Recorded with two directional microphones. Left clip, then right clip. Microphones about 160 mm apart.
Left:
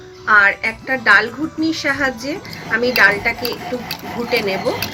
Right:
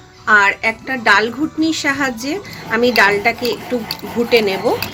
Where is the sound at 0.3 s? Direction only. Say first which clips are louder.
Right 1 dB; 90° right.